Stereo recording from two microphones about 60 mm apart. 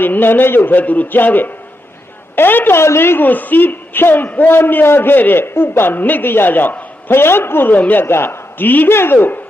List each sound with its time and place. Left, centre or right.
0.0 s a man's voice: left
2.8 s a man's voice: left
8.0 s a man's voice: left